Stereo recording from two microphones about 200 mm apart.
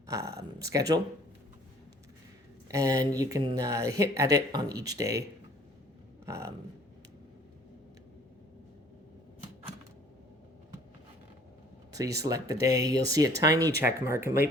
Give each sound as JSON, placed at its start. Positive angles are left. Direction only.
{"t": 0.1, "sound": "speech", "side_deg": -15}
{"t": 2.6, "sound": "speech", "side_deg": -15}
{"t": 6.2, "sound": "speech", "side_deg": -15}
{"t": 11.9, "sound": "speech", "side_deg": -15}